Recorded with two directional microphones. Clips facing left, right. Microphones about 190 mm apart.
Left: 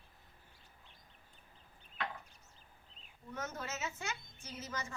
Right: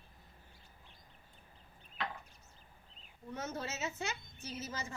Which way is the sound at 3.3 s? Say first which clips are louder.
Right 2 dB; 30° right (ahead or behind).